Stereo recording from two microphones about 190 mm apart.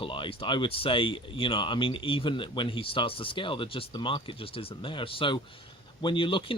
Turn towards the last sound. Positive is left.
turn(degrees=25)  # may be behind; listen again after turning